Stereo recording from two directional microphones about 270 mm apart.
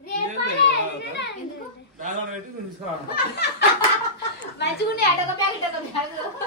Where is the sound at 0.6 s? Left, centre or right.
Left.